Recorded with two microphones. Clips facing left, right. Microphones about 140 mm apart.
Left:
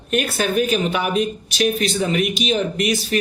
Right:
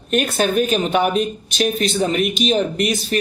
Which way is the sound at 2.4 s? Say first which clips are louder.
Right 3 dB; 40° right (ahead or behind).